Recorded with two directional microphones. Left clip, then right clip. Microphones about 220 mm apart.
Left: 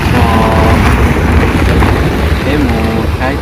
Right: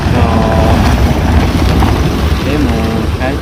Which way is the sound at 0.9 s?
30° right (ahead or behind).